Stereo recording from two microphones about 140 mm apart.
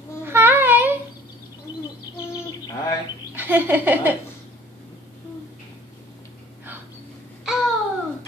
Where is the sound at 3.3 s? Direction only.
15° right (ahead or behind).